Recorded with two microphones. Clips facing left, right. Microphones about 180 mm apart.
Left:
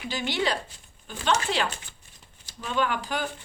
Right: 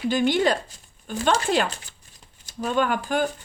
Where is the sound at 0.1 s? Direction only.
50° right (ahead or behind).